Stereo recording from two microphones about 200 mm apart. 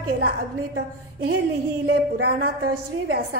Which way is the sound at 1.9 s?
50° right (ahead or behind).